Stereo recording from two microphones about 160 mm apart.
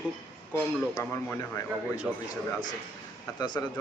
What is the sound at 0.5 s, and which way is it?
Speech, 15° left (ahead or behind).